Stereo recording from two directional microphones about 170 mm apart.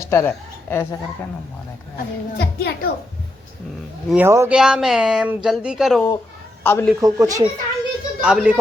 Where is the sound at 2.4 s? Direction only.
70° left (ahead or behind).